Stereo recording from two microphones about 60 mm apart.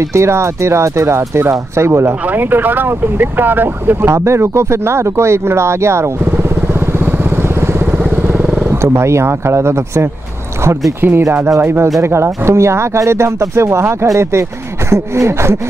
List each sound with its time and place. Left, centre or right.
0.1 s speech: right
2.3 s speech: right
4.1 s speech: right
8.0 s vehicle: right
8.6 s speech: right
11.0 s speech: right